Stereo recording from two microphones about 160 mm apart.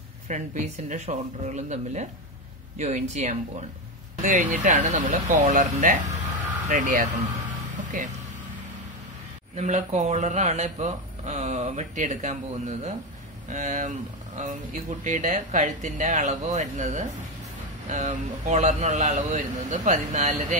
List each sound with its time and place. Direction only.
0.3 s speech: 50° right (ahead or behind)
9.6 s speech: 45° right (ahead or behind)